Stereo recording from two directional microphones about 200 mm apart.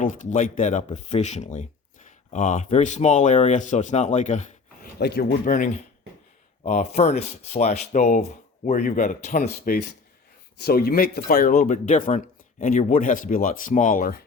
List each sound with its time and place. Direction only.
0.0 s speech: 40° left (ahead or behind)
4.9 s speech: 55° left (ahead or behind); by 9.5 s 35° left (ahead or behind)
10.6 s speech: 50° left (ahead or behind)